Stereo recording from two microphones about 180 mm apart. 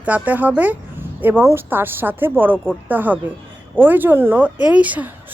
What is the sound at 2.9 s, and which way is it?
A woman's voice, 10° right (ahead or behind).